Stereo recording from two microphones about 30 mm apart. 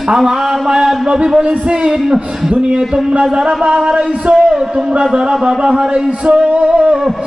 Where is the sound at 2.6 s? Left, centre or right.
Right.